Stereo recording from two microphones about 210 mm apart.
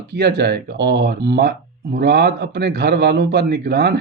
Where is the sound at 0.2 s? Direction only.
50° right (ahead or behind).